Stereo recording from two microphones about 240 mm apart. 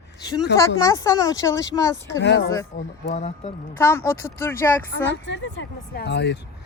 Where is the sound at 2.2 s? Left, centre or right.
Left.